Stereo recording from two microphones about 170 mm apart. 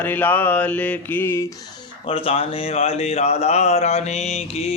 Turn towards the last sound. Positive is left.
turn(degrees=40)  # may be behind; listen again after turning